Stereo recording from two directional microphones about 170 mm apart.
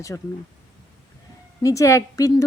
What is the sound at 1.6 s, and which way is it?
Speech, 20° left (ahead or behind).